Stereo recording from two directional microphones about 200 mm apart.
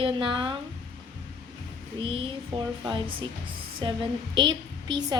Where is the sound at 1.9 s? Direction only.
25° right (ahead or behind).